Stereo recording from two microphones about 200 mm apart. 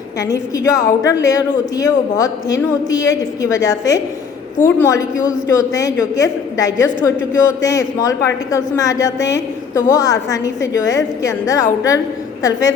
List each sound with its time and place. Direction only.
0.2 s a woman's voice: 15° left (ahead or behind)